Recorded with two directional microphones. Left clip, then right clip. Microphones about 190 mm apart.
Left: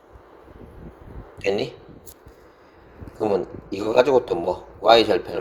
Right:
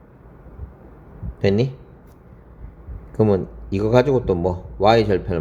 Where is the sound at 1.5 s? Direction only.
25° left (ahead or behind).